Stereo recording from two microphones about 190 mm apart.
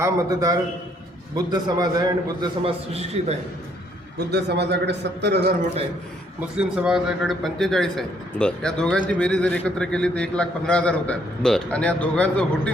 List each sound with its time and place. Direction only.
0.0 s a man's voice: 15° right (ahead or behind)
4.3 s a man's voice: 60° right (ahead or behind)
6.6 s a man's voice: 5° right (ahead or behind)